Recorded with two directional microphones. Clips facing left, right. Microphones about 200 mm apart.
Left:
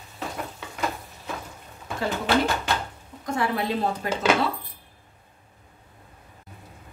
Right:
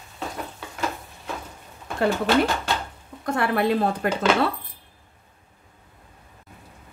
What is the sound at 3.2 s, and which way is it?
Speech, 60° right (ahead or behind).